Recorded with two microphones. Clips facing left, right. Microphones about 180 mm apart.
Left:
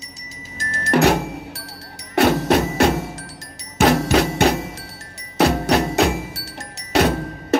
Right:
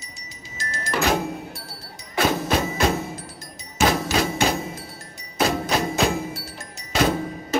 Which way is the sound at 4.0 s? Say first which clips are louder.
Left 5 dB; 65° left (ahead or behind).